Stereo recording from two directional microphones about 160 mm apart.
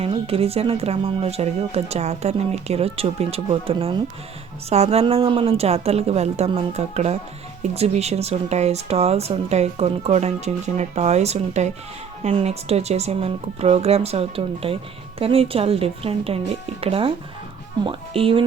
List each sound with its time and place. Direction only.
0.3 s speech: 40° right (ahead or behind)